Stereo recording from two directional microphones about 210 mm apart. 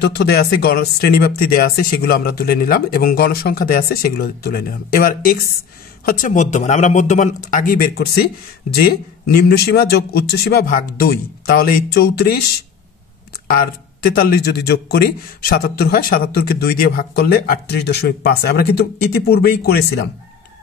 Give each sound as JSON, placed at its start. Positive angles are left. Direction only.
{"t": 0.0, "sound": "a man's voice", "side_deg": 50}
{"t": 14.0, "sound": "a man's voice", "side_deg": 50}